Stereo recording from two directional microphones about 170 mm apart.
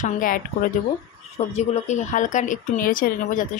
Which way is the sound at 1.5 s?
40° left (ahead or behind).